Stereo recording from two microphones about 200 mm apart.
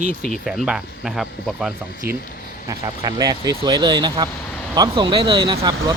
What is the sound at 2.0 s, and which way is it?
Speech, 50° right (ahead or behind).